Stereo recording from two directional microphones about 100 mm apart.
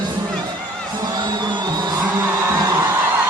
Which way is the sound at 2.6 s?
35° right (ahead or behind).